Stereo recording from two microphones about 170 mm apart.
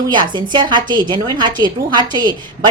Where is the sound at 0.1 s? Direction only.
25° right (ahead or behind).